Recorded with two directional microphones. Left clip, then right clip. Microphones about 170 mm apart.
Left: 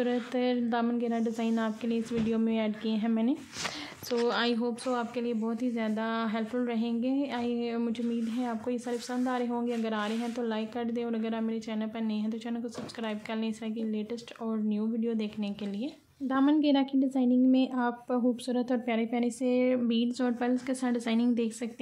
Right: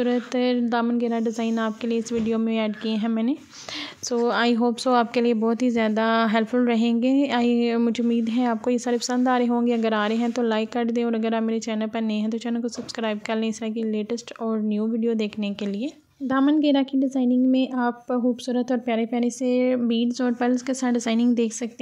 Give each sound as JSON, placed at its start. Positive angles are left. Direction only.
{"t": 0.0, "sound": "a woman's voice", "side_deg": -30}
{"t": 16.6, "sound": "a woman's voice", "side_deg": -30}